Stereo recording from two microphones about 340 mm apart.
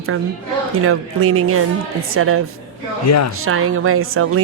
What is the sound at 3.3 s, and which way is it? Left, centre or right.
Speech, right.